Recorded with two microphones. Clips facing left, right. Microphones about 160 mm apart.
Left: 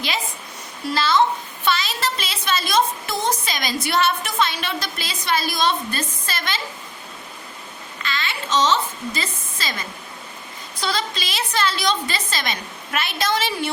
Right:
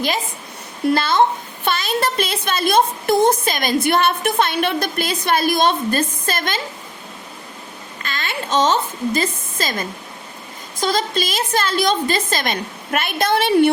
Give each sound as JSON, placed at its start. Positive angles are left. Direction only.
{"t": 0.9, "sound": "a woman's voice", "side_deg": -55}
{"t": 8.0, "sound": "a woman's voice", "side_deg": -50}